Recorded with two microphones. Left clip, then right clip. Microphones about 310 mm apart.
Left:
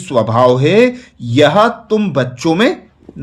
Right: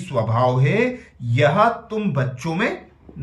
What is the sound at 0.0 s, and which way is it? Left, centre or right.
Speech, centre.